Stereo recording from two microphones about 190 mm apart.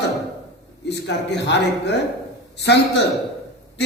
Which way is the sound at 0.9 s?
65° left (ahead or behind).